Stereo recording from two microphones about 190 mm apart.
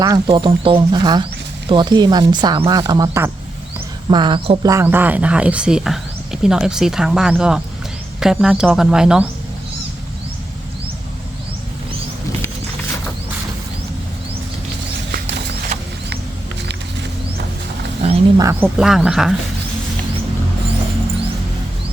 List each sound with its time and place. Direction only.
0.0 s speech: 20° right (ahead or behind); by 9.3 s 5° right (ahead or behind)
15.1 s horse: 60° right (ahead or behind)
18.3 s speech: 15° right (ahead or behind)
18.8 s speech: 5° right (ahead or behind)